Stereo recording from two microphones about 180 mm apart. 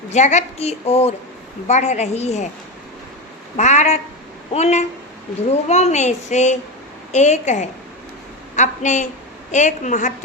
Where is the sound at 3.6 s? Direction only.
40° left (ahead or behind).